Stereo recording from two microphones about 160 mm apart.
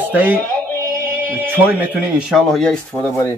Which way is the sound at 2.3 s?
5° left (ahead or behind).